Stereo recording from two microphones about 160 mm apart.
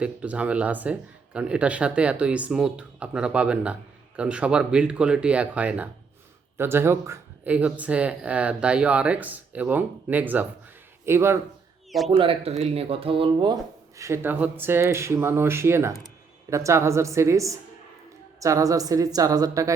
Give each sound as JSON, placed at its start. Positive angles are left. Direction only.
{"t": 0.0, "sound": "speech", "side_deg": -5}
{"t": 11.9, "sound": "speech", "side_deg": 0}
{"t": 12.1, "sound": "speech", "side_deg": -35}